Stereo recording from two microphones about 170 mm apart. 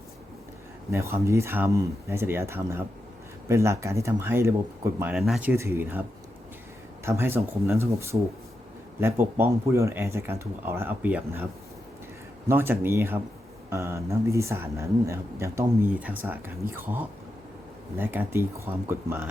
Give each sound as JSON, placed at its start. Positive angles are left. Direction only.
{"t": 0.9, "sound": "speech", "side_deg": -15}
{"t": 5.1, "sound": "speech", "side_deg": 0}
{"t": 5.5, "sound": "speech", "side_deg": -15}
{"t": 12.5, "sound": "speech", "side_deg": -15}